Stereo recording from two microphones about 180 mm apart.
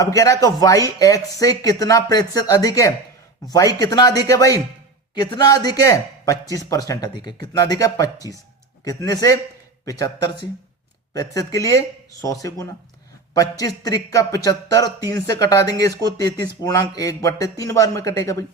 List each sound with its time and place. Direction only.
0.0 s speech: 20° left (ahead or behind)